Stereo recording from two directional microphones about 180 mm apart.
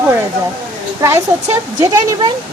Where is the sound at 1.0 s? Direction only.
15° right (ahead or behind).